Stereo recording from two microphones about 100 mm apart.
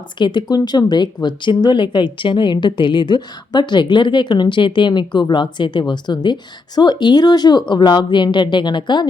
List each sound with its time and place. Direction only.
0.2 s speech: 45° left (ahead or behind)